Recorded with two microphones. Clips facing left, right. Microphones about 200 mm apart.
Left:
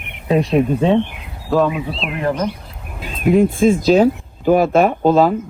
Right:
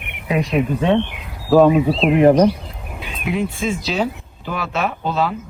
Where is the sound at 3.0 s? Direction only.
50° left (ahead or behind).